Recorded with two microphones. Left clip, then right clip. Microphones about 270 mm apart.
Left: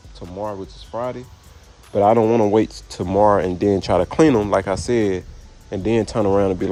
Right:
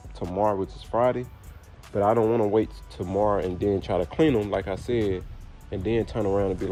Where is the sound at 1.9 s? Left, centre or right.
Left.